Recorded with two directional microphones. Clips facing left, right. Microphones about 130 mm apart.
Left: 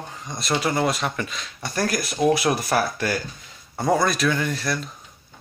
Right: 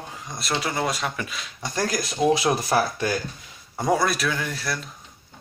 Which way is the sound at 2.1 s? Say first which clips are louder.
Even; 25° right (ahead or behind).